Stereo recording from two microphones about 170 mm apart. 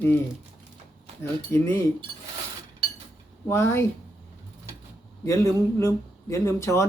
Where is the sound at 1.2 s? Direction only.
15° left (ahead or behind).